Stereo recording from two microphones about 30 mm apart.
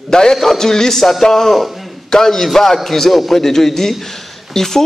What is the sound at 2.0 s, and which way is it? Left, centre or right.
Speech, left.